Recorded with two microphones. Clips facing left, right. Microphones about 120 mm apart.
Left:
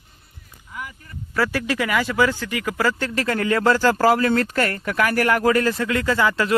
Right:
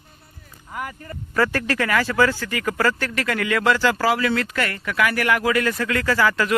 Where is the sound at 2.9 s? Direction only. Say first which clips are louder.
Left 2 dB; 25° left (ahead or behind).